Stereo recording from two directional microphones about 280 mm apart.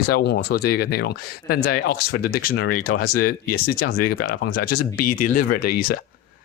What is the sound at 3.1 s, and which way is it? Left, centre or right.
Speech, left.